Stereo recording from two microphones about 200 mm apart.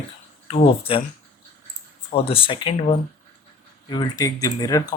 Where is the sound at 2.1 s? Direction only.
25° left (ahead or behind).